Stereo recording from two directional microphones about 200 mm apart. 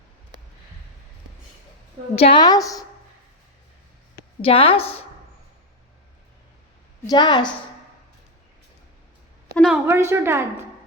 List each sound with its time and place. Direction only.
2.1 s a woman's voice: 25° left (ahead or behind)
4.4 s a woman's voice: 25° left (ahead or behind)
7.1 s a woman's voice: 20° left (ahead or behind)
9.6 s a woman's voice: 5° right (ahead or behind)